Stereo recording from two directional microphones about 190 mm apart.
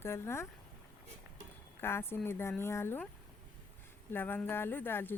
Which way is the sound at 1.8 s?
10° left (ahead or behind).